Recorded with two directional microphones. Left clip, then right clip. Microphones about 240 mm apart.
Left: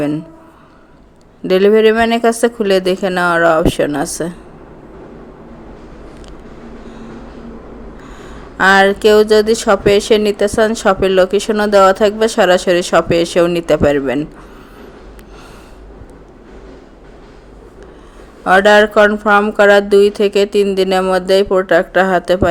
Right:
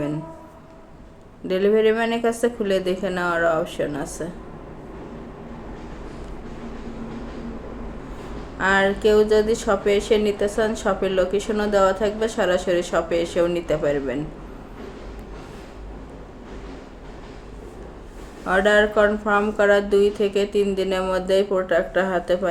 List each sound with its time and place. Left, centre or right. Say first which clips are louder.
1.5 s speech: left 9 dB; left
8.5 s speech: left 10 dB; left
18.4 s speech: left 9 dB; left